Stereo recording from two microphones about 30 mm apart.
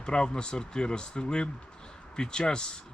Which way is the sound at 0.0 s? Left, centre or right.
Left.